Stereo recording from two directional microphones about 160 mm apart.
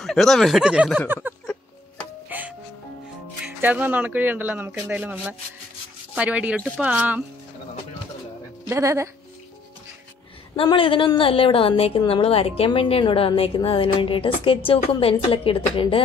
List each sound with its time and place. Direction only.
0.0 s speech: centre (ahead or behind)
2.2 s music: 10° right (ahead or behind)
3.4 s speech: 10° right (ahead or behind)
8.6 s speech: 20° right (ahead or behind)
10.5 s a woman's voice: 35° left (ahead or behind)